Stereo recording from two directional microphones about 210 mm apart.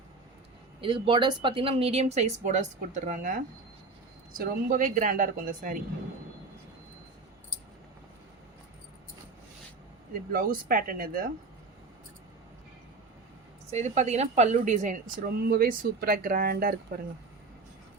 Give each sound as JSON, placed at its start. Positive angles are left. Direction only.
{"t": 0.8, "sound": "a woman's voice", "side_deg": -25}
{"t": 10.3, "sound": "speech", "side_deg": -40}
{"t": 13.7, "sound": "a woman's voice", "side_deg": -30}